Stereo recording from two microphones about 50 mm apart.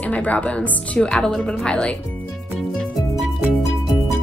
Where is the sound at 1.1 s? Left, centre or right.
Centre.